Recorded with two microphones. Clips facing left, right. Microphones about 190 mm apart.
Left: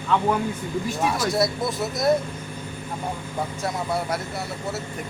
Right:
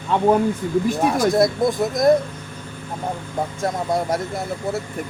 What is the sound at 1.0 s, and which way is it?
Speech, 50° right (ahead or behind).